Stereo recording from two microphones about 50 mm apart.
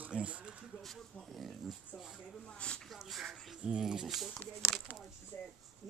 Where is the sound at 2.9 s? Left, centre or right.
Centre.